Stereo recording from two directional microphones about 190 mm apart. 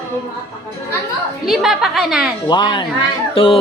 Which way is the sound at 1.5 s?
Centre (ahead or behind).